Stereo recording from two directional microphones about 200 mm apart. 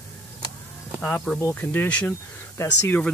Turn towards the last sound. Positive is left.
turn(degrees=10)  # may be behind; listen again after turning